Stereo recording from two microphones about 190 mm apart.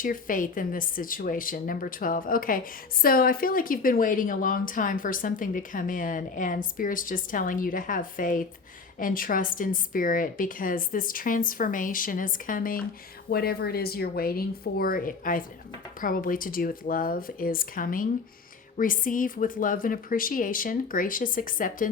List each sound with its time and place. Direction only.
0.0 s speech: 45° left (ahead or behind)